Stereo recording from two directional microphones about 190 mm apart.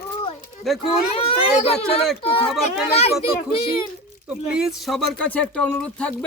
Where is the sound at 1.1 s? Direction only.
30° left (ahead or behind).